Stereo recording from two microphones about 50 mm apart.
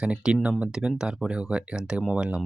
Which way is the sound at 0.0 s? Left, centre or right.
Centre.